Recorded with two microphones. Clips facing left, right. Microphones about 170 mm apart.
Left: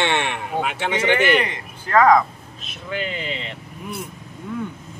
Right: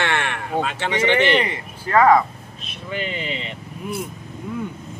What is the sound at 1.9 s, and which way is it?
Speech, 5° right (ahead or behind).